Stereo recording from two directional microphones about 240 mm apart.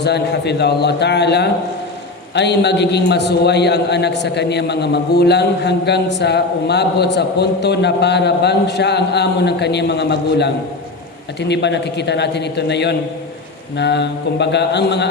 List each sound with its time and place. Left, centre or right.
0.0 s a man's voice: left